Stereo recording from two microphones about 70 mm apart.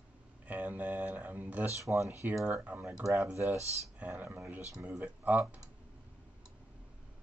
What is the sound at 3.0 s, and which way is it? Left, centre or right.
Speech, right.